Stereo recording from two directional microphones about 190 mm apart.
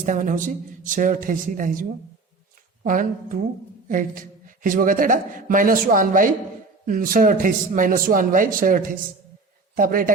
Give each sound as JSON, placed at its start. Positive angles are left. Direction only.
{"t": 0.0, "sound": "a woman's voice", "side_deg": -40}